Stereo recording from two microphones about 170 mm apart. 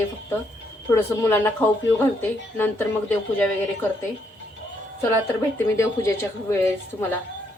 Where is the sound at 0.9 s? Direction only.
15° left (ahead or behind).